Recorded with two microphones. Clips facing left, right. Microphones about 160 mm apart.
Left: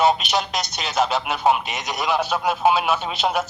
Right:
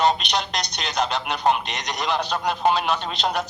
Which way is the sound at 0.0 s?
5° left (ahead or behind).